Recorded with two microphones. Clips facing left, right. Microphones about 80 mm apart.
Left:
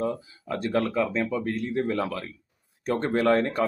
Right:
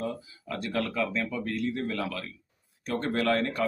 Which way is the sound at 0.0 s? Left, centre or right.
Left.